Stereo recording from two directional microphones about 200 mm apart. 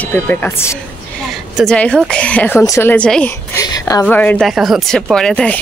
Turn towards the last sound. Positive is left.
turn(degrees=5)  # may be behind; listen again after turning